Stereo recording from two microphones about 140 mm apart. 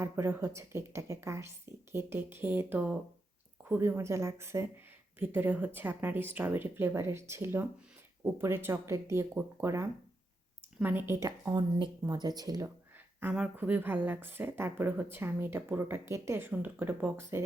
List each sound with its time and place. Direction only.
0.0 s speech: 15° right (ahead or behind)
13.1 s speech: 10° right (ahead or behind)